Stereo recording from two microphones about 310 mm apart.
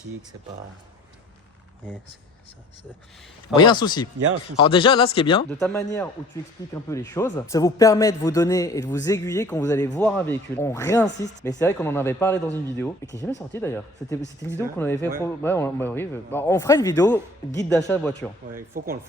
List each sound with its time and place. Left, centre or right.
3.5 s speech: centre
5.5 s speech: centre
18.5 s speech: right